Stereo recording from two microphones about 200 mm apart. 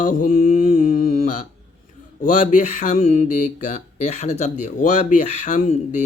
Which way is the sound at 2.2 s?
40° left (ahead or behind).